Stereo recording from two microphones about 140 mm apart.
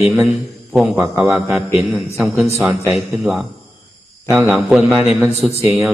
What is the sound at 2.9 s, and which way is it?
Speech, 15° right (ahead or behind).